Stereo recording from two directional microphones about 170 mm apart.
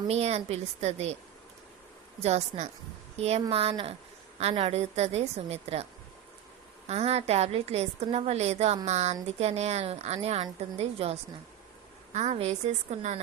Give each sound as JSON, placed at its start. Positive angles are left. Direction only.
{"t": 0.1, "sound": "a woman's voice", "side_deg": -40}
{"t": 2.2, "sound": "a woman's voice", "side_deg": -40}
{"t": 6.8, "sound": "a woman's voice", "side_deg": -40}